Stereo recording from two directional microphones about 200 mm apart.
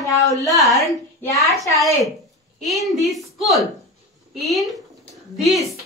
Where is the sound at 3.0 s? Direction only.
Centre (ahead or behind).